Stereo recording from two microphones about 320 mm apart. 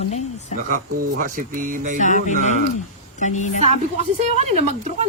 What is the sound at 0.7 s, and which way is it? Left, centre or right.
Speech, right.